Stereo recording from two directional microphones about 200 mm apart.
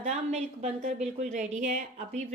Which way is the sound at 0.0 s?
35° right (ahead or behind).